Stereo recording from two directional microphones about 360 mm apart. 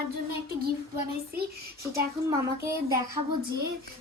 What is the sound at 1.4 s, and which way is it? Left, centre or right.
Speech, right.